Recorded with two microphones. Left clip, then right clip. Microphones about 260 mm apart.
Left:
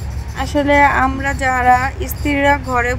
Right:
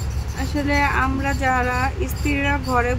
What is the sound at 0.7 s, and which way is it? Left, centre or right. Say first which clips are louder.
Speech: left 8 dB; left.